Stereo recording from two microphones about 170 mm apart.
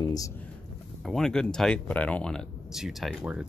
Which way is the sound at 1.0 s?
5° left (ahead or behind).